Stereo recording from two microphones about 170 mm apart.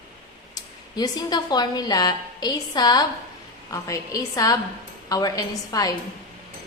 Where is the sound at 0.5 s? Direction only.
25° left (ahead or behind).